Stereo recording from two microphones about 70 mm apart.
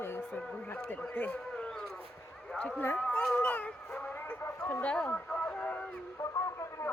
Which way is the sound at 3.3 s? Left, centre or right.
Left.